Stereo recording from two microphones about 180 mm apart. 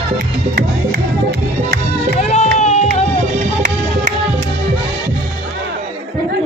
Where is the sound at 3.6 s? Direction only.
45° right (ahead or behind).